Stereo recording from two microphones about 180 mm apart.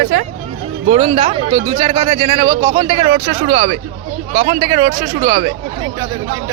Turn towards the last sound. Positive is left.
turn(degrees=-35)  # may be behind; listen again after turning